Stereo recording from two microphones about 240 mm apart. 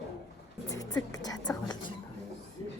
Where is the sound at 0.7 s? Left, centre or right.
Centre.